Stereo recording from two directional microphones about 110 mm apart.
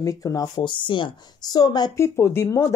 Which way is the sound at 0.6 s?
45° left (ahead or behind).